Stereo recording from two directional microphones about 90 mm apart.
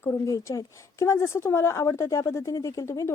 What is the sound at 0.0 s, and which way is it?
Speech, 35° left (ahead or behind).